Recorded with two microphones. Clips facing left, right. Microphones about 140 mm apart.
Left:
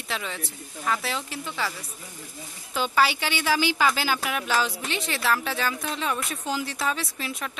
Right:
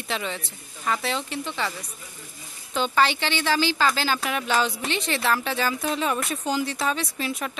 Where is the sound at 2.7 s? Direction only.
5° left (ahead or behind).